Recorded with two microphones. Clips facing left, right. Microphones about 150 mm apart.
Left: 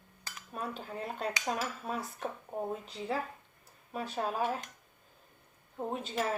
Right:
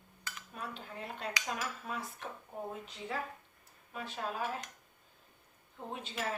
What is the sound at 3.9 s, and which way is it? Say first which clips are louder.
Speech: left 5 dB; 40° left (ahead or behind).